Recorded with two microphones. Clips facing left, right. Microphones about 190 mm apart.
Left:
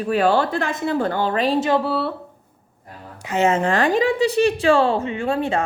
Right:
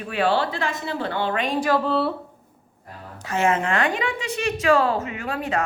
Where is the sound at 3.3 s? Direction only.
20° left (ahead or behind).